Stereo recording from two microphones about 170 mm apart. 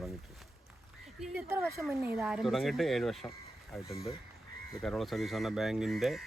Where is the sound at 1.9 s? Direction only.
15° right (ahead or behind).